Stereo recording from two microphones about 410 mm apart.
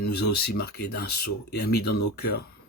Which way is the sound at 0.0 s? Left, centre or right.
Left.